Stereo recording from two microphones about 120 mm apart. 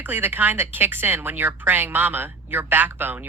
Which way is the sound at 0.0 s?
15° right (ahead or behind).